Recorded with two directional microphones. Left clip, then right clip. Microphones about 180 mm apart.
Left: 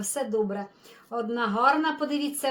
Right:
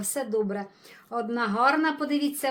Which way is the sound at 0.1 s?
35° right (ahead or behind).